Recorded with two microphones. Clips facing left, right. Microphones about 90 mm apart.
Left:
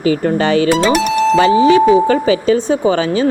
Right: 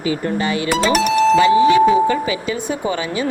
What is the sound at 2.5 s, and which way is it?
Speech, 30° left (ahead or behind).